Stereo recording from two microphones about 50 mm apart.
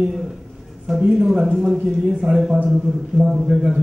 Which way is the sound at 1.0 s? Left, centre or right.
Centre.